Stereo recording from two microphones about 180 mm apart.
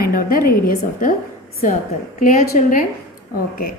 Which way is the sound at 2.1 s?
55° left (ahead or behind).